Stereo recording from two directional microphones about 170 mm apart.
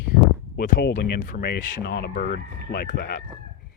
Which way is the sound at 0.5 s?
75° left (ahead or behind).